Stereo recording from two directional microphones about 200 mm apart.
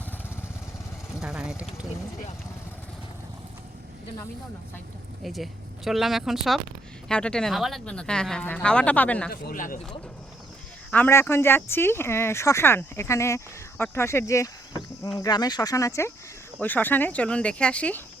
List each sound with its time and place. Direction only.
1.2 s speech: 5° right (ahead or behind)
5.2 s speech: centre (ahead or behind)
9.3 s speech: 45° left (ahead or behind)
10.9 s speech: 10° left (ahead or behind)